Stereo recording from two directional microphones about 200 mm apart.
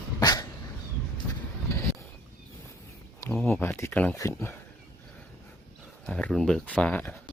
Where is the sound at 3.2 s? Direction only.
10° left (ahead or behind).